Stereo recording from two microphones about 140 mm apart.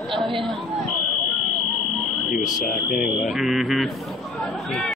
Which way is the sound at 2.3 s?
75° left (ahead or behind).